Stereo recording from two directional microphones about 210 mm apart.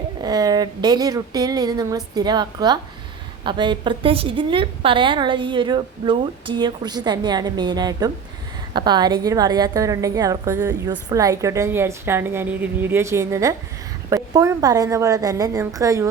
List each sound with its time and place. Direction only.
0.2 s a woman's voice: 20° right (ahead or behind)